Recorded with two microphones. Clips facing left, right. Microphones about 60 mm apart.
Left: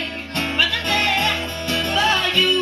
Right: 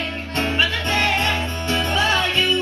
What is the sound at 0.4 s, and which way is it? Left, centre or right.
Music, right.